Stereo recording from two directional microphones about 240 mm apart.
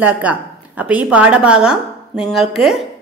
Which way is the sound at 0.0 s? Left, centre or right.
Centre.